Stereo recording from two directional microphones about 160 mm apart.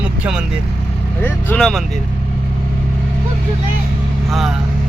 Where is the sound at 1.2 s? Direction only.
15° left (ahead or behind).